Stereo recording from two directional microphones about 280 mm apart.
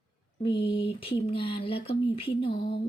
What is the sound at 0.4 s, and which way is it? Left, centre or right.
Speech, centre.